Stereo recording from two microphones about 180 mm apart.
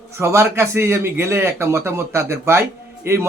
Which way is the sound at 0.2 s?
15° right (ahead or behind).